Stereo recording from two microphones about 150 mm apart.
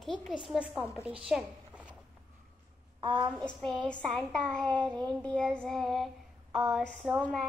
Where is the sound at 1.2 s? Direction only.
5° right (ahead or behind).